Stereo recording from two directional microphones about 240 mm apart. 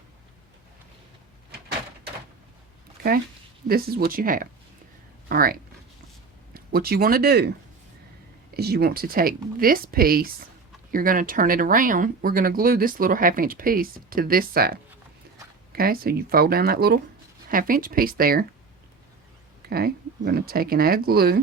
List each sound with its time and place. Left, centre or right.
3.7 s speech: right
8.5 s speech: right
19.6 s speech: right